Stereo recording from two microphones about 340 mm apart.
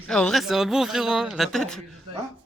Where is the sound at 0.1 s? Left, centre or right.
Centre.